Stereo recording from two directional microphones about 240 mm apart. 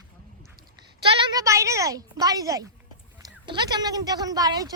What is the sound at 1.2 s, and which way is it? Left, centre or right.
Speech, centre.